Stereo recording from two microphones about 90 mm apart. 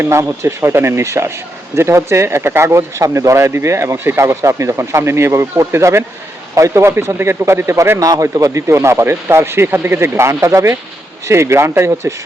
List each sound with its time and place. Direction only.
0.0 s speech: 30° right (ahead or behind)